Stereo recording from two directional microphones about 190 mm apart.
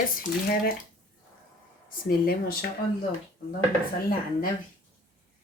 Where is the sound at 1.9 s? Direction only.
50° left (ahead or behind).